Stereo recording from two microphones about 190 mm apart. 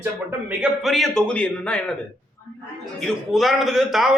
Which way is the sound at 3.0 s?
Centre (ahead or behind).